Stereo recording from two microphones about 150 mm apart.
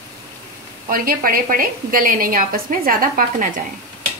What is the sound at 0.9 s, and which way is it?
A woman's voice, 75° right (ahead or behind).